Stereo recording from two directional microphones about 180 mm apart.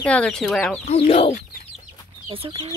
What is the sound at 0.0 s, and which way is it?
Speech, 5° left (ahead or behind).